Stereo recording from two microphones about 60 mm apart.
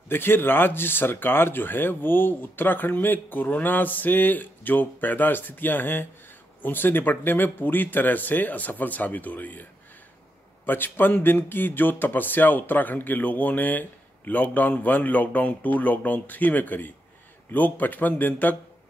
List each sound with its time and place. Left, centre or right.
0.1 s speech: left